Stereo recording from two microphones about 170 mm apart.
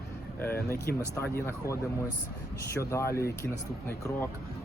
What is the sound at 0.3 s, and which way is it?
Speech, 15° left (ahead or behind).